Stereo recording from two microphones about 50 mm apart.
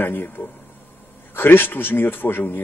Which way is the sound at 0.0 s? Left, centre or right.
Left.